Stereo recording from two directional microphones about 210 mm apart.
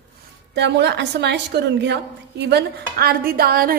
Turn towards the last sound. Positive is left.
turn(degrees=-45)  # may be behind; listen again after turning